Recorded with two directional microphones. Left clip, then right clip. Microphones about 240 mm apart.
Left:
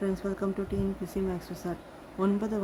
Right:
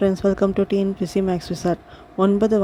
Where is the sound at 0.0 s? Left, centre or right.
Right.